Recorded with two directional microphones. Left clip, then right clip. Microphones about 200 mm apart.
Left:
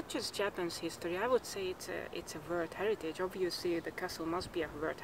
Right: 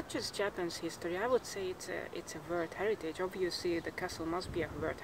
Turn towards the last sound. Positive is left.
turn(degrees=0)  # may be behind; listen again after turning